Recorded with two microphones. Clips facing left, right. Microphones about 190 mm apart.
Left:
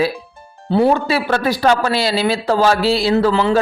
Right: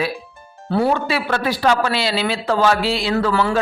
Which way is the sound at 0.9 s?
40° left (ahead or behind).